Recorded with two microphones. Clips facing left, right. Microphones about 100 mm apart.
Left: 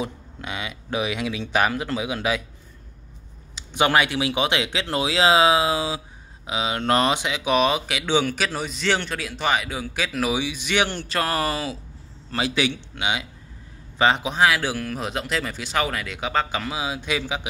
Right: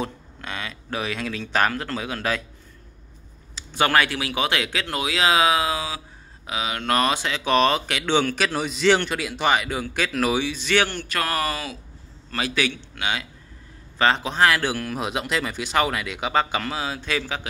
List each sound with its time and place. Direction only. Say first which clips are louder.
0.0 s speech: even; 15° left (ahead or behind)
3.5 s speech: left 1 dB; 20° left (ahead or behind)
10.9 s a man's voice: left 1 dB; 25° left (ahead or behind)